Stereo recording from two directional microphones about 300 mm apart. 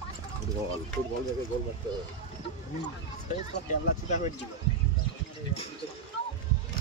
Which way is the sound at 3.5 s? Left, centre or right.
Left.